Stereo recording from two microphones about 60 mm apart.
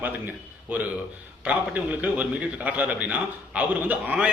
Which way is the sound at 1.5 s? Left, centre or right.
Right.